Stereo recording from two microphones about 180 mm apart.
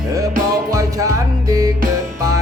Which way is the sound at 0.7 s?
20° right (ahead or behind).